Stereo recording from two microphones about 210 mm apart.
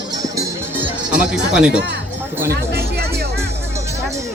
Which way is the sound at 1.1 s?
5° right (ahead or behind).